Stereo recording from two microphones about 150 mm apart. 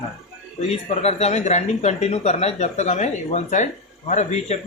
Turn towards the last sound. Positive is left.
turn(degrees=50)  # may be behind; listen again after turning